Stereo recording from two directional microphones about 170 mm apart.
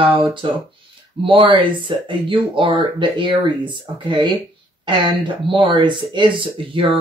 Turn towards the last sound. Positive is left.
turn(degrees=-30)  # may be behind; listen again after turning